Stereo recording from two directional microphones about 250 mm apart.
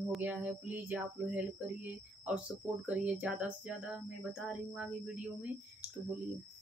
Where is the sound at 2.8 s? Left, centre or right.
Centre.